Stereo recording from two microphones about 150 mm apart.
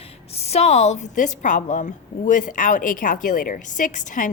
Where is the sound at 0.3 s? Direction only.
45° left (ahead or behind).